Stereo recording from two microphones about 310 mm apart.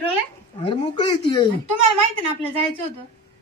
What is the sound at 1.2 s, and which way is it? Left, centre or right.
Speech, centre.